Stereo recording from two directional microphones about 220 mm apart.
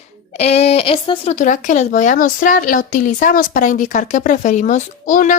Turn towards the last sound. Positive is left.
turn(degrees=35)  # may be behind; listen again after turning